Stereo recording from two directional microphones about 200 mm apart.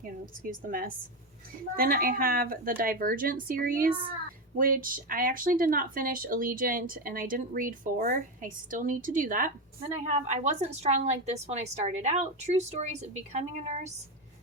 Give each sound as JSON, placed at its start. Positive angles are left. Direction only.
{"t": 0.4, "sound": "a woman's voice", "side_deg": -45}